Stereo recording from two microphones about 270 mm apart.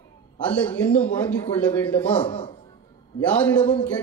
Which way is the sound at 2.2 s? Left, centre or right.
Centre.